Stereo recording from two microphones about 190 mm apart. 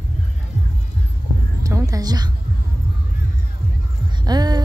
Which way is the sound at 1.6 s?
15° right (ahead or behind).